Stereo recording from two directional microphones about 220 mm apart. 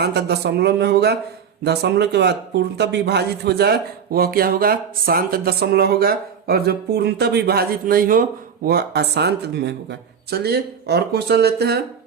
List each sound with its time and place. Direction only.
0.0 s speech: 50° right (ahead or behind)